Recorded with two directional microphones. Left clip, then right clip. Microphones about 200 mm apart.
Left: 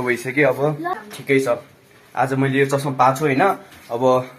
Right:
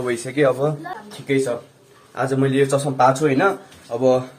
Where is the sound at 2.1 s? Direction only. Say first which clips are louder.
Left 1 dB; 5° right (ahead or behind).